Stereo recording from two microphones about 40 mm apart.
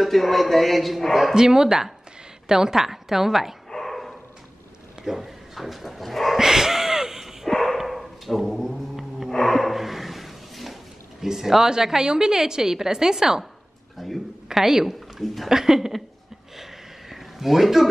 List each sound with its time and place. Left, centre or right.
0.0 s a man's voice: centre
1.3 s a woman's voice: centre
3.7 s dog: centre
5.0 s speech: centre
6.3 s wheeze: centre
7.4 s dog: centre
7.7 s dog: centre
9.3 s a sound: centre
13.9 s a woman's voice: centre
17.1 s a sound: centre